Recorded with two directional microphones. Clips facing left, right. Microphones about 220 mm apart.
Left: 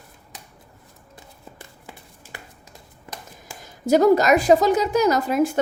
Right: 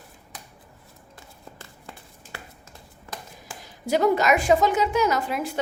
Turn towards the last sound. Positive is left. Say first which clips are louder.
# left 6 dB
turn(degrees=45)  # may be behind; listen again after turning